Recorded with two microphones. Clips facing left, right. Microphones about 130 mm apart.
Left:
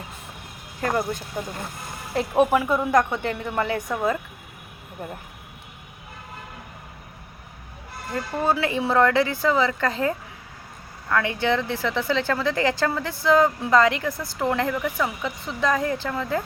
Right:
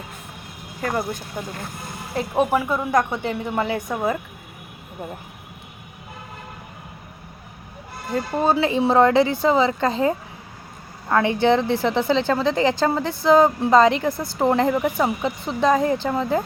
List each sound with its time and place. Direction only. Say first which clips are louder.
0.8 s speech: even; centre (ahead or behind)
2.5 s speech: even; centre (ahead or behind)
8.1 s a woman's voice: right 4 dB; 20° right (ahead or behind)